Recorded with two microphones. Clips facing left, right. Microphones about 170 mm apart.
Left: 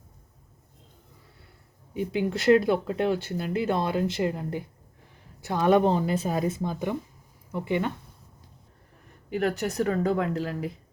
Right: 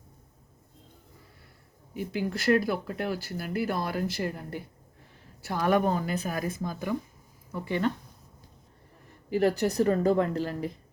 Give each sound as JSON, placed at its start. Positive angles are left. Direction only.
{"t": 1.9, "sound": "speech", "side_deg": 25}
{"t": 9.3, "sound": "speech", "side_deg": 0}